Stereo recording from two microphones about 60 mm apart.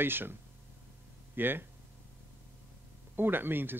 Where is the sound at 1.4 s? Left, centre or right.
Right.